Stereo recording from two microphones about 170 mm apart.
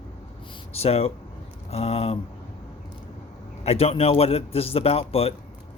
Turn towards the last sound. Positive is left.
turn(degrees=35)  # may be behind; listen again after turning